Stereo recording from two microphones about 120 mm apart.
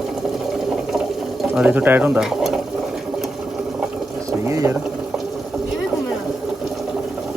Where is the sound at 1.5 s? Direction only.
10° right (ahead or behind).